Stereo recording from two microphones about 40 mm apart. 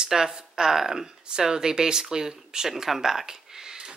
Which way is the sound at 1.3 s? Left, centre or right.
Centre.